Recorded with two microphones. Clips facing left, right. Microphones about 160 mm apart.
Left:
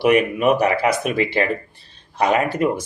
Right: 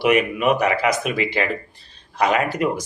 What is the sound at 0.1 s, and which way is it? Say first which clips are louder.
Speech: left 2 dB; 30° left (ahead or behind).